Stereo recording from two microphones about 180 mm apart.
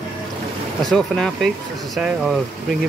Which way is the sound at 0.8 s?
Centre (ahead or behind).